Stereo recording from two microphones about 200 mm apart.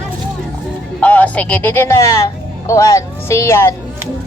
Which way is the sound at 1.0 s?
5° left (ahead or behind).